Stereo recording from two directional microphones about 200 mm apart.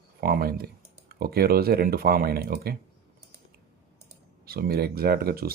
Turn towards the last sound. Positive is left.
turn(degrees=-50)  # may be behind; listen again after turning